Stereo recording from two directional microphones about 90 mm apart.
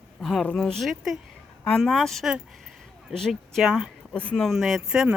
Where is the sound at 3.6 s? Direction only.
5° right (ahead or behind).